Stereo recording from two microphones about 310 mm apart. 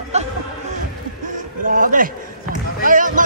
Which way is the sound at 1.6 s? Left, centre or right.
Right.